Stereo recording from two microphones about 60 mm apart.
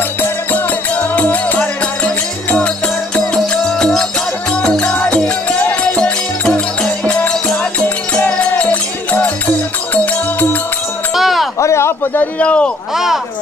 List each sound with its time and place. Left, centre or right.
1.1 s music: left
3.6 s music: centre
6.4 s music: centre
11.1 s a sound: centre
11.6 s a sound: left
12.4 s speech: left
12.9 s speech: centre